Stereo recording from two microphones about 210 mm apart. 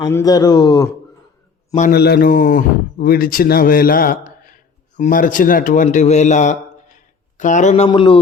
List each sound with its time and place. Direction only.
0.0 s speech: 15° left (ahead or behind)
1.9 s a man's voice: 50° left (ahead or behind); by 8.2 s 25° left (ahead or behind)